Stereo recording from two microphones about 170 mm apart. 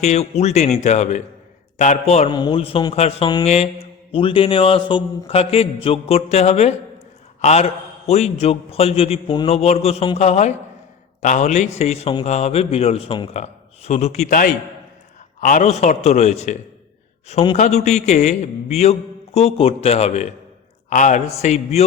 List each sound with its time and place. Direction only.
0.0 s a man's voice: 40° left (ahead or behind)
2.3 s a man's voice: 30° left (ahead or behind)